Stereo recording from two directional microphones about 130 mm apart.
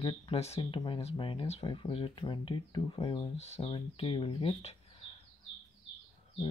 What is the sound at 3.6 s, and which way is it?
Speech, 40° left (ahead or behind).